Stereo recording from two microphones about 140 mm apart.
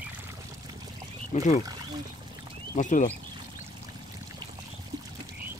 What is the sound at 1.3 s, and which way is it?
Speech, 55° left (ahead or behind).